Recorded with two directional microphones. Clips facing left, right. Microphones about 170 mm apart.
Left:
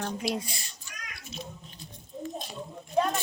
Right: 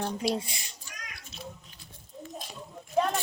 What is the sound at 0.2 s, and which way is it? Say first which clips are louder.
Speech: right 3 dB; 35° right (ahead or behind).